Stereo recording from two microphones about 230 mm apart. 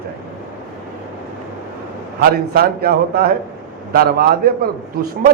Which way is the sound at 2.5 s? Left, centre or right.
Right.